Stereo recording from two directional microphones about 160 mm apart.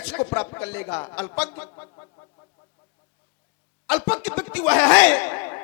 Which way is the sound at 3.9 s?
10° left (ahead or behind).